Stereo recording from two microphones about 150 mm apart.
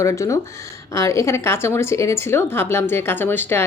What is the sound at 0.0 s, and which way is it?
A woman's voice, 20° left (ahead or behind).